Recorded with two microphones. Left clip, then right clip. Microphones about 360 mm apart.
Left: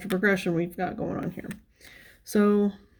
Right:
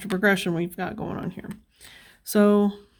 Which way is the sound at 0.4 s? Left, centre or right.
Right.